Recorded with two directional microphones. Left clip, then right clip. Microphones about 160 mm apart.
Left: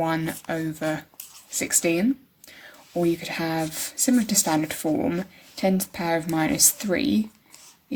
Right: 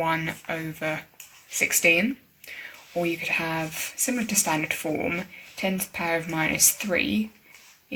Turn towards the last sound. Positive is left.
turn(degrees=50)  # may be behind; listen again after turning